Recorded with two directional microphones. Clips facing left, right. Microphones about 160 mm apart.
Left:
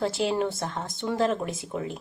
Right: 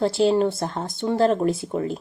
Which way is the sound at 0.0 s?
30° right (ahead or behind).